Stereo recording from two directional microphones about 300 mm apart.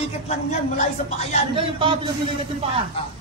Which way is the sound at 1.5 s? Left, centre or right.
Centre.